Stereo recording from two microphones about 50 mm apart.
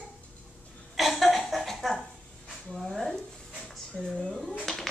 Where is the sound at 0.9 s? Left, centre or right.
Centre.